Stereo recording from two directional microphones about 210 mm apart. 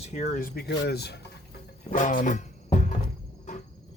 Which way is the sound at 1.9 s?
40° left (ahead or behind).